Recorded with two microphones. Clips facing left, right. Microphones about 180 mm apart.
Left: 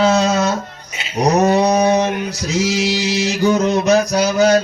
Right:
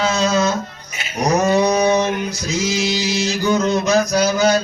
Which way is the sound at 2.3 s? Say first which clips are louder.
Left 3 dB; 65° left (ahead or behind).